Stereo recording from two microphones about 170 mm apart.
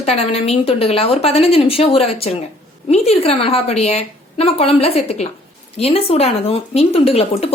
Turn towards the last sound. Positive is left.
turn(degrees=35)  # may be behind; listen again after turning